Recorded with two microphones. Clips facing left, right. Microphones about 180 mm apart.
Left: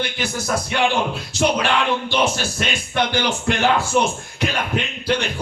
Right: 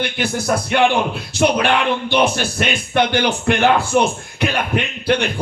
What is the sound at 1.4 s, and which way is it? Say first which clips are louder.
A man's voice: right 3 dB; 60° right (ahead or behind).